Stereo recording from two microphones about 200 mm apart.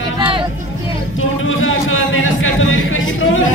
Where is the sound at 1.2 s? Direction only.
90° left.